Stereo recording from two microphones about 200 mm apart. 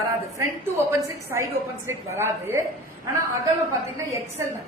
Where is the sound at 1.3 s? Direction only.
15° right (ahead or behind).